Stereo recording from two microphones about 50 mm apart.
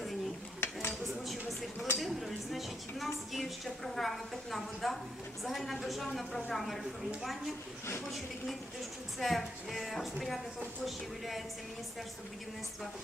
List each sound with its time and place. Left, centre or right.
0.6 s dishes: left
1.3 s a sound: centre
2.2 s vehicle: centre
3.3 s a woman's voice: centre
9.1 s a woman's voice: centre